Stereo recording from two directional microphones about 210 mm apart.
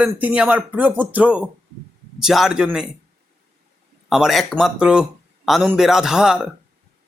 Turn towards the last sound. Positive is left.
turn(degrees=-5)  # may be behind; listen again after turning